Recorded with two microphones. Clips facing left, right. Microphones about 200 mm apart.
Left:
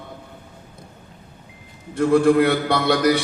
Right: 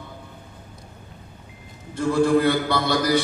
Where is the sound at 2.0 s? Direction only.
60° left (ahead or behind).